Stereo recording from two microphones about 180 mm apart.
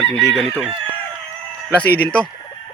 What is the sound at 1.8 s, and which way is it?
Speech, 5° left (ahead or behind).